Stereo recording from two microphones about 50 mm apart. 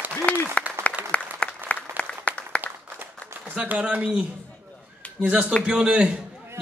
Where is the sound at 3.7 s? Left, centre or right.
Right.